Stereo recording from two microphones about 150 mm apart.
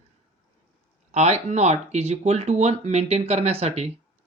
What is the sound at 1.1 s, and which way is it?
Speech, 50° right (ahead or behind).